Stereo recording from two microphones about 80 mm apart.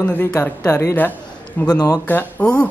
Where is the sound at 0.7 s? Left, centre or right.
Left.